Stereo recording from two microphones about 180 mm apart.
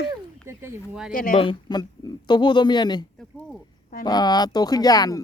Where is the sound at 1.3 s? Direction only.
30° left (ahead or behind).